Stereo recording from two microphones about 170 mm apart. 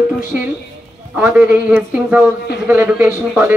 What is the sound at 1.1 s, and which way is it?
Speech, 5° right (ahead or behind).